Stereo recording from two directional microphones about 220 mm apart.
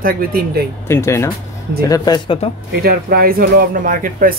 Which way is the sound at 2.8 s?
45° right (ahead or behind).